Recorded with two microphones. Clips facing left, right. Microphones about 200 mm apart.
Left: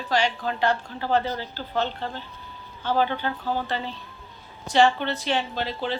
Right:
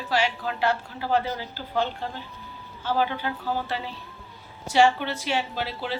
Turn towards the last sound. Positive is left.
turn(degrees=-10)  # may be behind; listen again after turning